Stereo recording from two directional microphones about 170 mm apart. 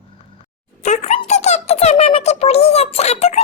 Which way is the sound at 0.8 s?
40° left (ahead or behind).